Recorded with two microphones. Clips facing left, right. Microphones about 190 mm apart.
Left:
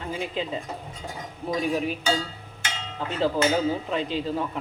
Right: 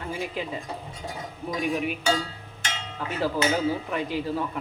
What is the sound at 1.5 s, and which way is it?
Dishes, 35° left (ahead or behind).